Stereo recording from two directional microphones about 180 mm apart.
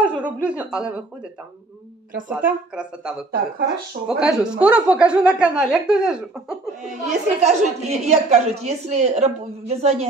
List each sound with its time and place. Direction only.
0.0 s a woman's voice: 5° right (ahead or behind)
2.2 s speech: 5° right (ahead or behind)
3.3 s speech: 65° right (ahead or behind)
4.1 s speech: 5° right (ahead or behind)
7.1 s a woman's voice: 40° right (ahead or behind)